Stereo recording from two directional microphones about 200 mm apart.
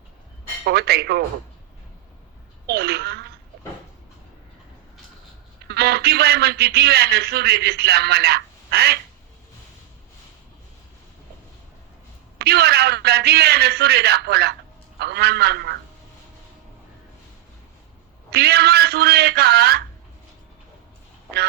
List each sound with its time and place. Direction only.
0.6 s a man's voice: 55° right (ahead or behind)
2.6 s speech: 55° right (ahead or behind)
5.6 s a man's voice: 55° right (ahead or behind)
12.4 s a man's voice: 55° right (ahead or behind)
18.3 s a man's voice: 55° right (ahead or behind)